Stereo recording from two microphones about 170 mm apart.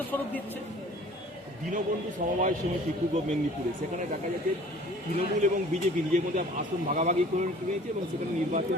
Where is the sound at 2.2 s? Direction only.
50° right (ahead or behind).